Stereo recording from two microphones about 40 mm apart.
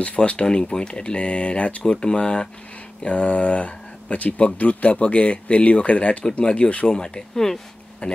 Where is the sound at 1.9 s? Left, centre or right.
Left.